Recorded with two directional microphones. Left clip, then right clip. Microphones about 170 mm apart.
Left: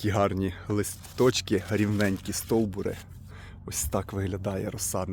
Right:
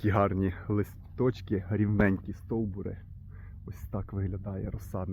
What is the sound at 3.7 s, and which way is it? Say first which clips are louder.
Speech: left 10 dB; 10° left (ahead or behind).